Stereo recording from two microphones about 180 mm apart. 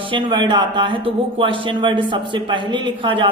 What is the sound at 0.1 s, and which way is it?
Speech, 25° right (ahead or behind).